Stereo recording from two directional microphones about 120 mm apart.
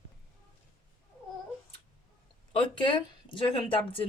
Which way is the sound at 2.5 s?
45° left (ahead or behind).